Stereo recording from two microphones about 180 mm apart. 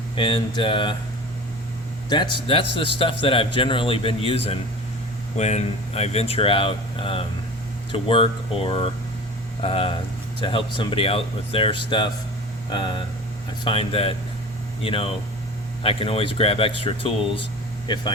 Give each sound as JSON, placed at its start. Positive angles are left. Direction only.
{"t": 0.2, "sound": "a man's voice", "side_deg": 30}
{"t": 2.0, "sound": "a man's voice", "side_deg": 25}